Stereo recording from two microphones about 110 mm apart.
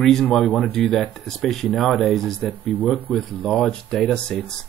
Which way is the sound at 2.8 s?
15° left (ahead or behind).